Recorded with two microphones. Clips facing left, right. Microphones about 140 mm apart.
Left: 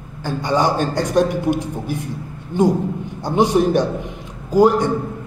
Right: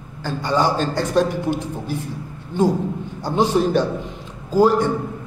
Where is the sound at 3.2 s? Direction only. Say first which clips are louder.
Left 2 dB; 15° left (ahead or behind).